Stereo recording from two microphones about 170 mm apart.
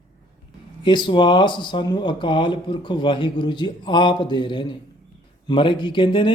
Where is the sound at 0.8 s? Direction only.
25° left (ahead or behind).